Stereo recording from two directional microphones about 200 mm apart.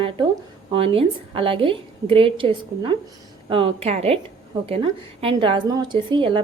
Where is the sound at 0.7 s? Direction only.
25° right (ahead or behind).